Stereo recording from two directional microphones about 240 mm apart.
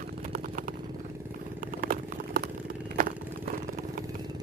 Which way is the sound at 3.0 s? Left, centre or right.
Right.